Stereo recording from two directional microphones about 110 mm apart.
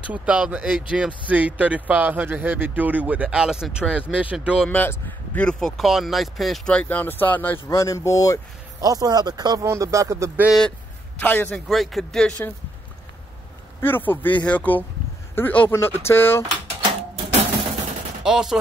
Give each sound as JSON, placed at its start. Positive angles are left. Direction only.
{"t": 0.0, "sound": "speech", "side_deg": -10}
{"t": 4.6, "sound": "speech", "side_deg": 15}
{"t": 8.8, "sound": "speech", "side_deg": -35}
{"t": 11.1, "sound": "speech", "side_deg": 15}
{"t": 11.5, "sound": "speech", "side_deg": 0}
{"t": 13.7, "sound": "speech", "side_deg": 20}
{"t": 18.2, "sound": "speech", "side_deg": -5}